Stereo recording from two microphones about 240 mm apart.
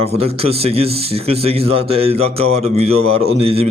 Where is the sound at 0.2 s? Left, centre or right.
Right.